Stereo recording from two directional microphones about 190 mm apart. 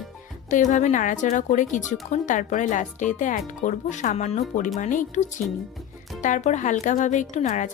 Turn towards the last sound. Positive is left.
turn(degrees=40)  # may be behind; listen again after turning